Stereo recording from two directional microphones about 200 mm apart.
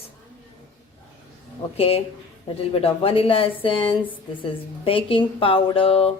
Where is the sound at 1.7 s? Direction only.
30° left (ahead or behind).